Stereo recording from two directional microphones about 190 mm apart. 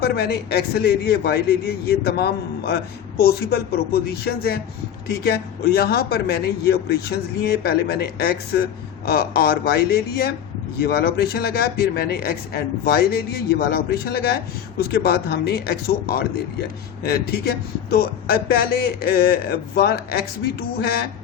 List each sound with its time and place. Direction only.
0.0 s speech: 55° left (ahead or behind)
5.7 s speech: 55° left (ahead or behind)